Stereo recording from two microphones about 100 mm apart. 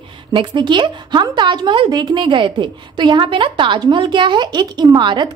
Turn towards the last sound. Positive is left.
turn(degrees=-50)  # may be behind; listen again after turning